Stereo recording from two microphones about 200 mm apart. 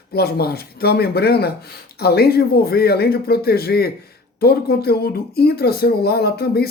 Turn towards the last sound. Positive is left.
turn(degrees=50)  # may be behind; listen again after turning